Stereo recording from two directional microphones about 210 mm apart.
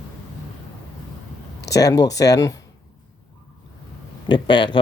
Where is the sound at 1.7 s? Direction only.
15° left (ahead or behind).